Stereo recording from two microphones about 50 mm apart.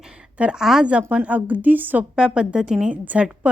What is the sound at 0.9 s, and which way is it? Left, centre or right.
A woman's voice, right.